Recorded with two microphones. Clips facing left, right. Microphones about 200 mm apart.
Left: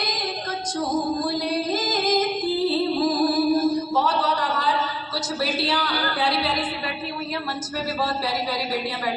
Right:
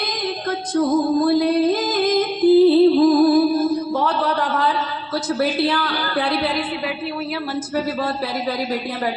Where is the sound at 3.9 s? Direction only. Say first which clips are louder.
Right 2 dB; 55° right (ahead or behind).